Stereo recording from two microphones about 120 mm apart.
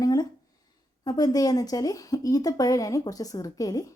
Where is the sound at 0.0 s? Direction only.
30° left (ahead or behind).